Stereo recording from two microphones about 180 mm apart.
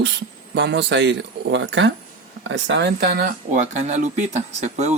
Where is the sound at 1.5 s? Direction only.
90° right; by 4.9 s 40° right (ahead or behind).